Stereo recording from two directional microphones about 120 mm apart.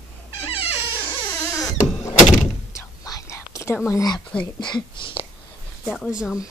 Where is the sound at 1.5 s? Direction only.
25° left (ahead or behind).